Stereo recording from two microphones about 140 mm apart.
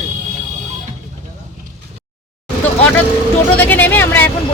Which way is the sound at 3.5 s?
10° left (ahead or behind).